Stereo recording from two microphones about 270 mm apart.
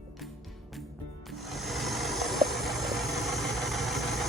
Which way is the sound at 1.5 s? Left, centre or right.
Centre.